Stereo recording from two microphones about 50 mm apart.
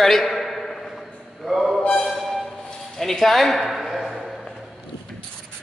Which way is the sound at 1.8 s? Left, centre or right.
Centre.